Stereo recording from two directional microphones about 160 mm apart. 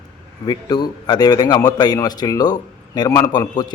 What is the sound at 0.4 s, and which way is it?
A man's voice, 25° left (ahead or behind).